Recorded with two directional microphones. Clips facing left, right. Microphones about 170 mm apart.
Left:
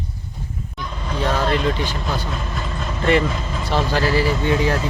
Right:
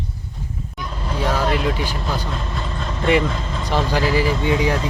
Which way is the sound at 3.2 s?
5° left (ahead or behind).